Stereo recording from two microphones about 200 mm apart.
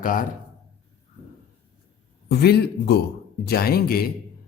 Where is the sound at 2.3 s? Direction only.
55° left (ahead or behind).